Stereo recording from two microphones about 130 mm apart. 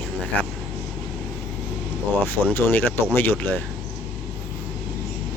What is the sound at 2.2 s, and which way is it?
Speech, 15° left (ahead or behind).